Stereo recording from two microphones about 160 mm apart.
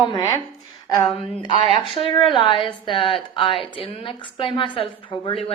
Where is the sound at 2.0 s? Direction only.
30° left (ahead or behind).